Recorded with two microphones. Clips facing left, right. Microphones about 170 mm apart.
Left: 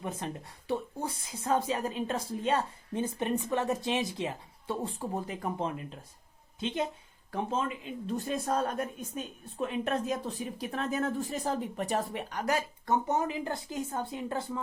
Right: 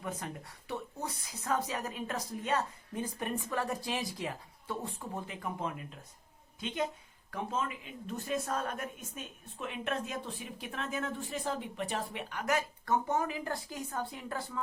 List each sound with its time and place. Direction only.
0.2 s a woman's voice: 25° left (ahead or behind)
12.8 s a woman's voice: 20° left (ahead or behind)